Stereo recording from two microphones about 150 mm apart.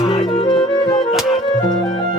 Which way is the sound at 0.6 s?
25° left (ahead or behind).